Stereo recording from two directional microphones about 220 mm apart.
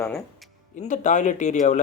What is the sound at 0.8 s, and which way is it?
Speech, 35° left (ahead or behind).